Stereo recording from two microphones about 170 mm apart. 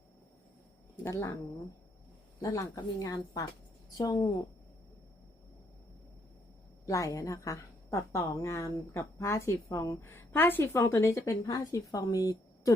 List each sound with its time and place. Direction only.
1.0 s a woman's voice: 15° left (ahead or behind)
2.4 s a woman's voice: 20° left (ahead or behind)
6.8 s a woman's voice: 20° left (ahead or behind)